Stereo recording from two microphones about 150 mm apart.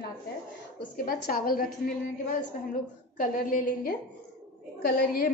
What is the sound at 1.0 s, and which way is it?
Speech, 75° left (ahead or behind).